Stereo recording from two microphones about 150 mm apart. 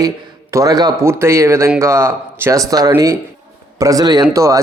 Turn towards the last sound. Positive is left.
turn(degrees=-20)  # may be behind; listen again after turning